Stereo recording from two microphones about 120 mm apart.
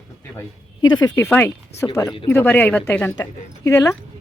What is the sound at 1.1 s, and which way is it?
Speech, 20° left (ahead or behind).